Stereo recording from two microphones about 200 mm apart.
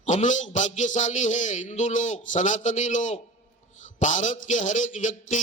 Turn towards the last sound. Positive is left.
turn(degrees=40)  # may be behind; listen again after turning